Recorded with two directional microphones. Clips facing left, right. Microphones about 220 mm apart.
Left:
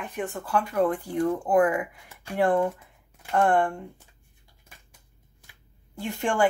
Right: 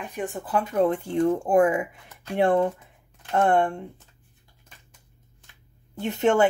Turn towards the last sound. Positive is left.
turn(degrees=-20)  # may be behind; listen again after turning